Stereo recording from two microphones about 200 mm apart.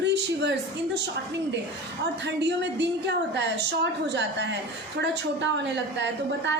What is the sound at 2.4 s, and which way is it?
A woman's voice, 60° right (ahead or behind).